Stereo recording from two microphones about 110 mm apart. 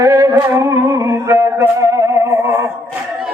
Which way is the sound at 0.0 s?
25° right (ahead or behind).